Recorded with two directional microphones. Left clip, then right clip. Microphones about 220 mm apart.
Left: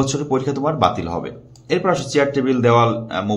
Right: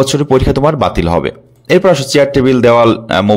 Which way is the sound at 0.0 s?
40° right (ahead or behind).